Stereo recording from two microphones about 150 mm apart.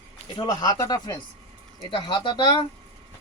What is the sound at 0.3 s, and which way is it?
Speech, 25° left (ahead or behind).